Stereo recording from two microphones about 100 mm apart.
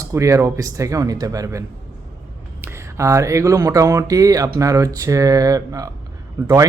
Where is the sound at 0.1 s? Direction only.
30° right (ahead or behind).